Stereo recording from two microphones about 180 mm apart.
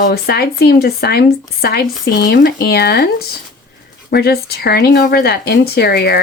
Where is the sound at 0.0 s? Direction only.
60° left (ahead or behind).